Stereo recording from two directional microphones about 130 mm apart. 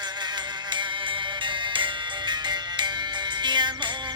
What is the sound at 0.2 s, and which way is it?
Music, 35° right (ahead or behind).